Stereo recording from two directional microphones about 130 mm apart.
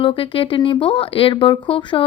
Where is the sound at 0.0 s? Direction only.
45° left (ahead or behind).